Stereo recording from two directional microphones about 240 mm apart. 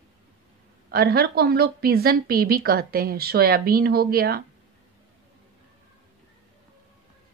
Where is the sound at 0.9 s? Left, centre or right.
Right.